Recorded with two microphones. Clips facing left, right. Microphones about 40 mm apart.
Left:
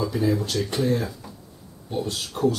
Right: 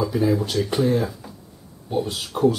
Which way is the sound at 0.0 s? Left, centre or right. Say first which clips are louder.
Right 3 dB; centre.